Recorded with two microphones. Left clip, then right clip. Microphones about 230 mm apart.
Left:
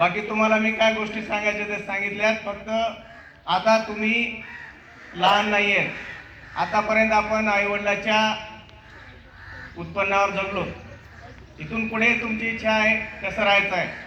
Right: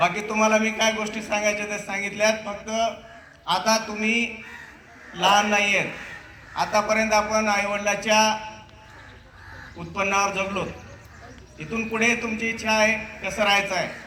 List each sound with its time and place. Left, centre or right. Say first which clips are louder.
0.0 s a man's voice: even; right
9.9 s a man's voice: left 1 dB; right
11.7 s a man's voice: left 1 dB; right